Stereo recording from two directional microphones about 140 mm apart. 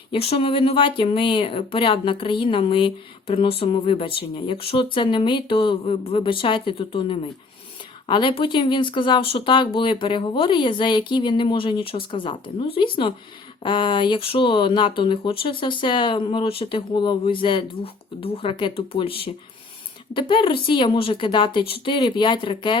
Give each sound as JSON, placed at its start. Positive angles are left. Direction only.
{"t": 0.1, "sound": "speech", "side_deg": 40}